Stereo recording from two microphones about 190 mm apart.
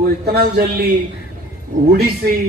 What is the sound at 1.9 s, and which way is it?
Speech, 55° right (ahead or behind).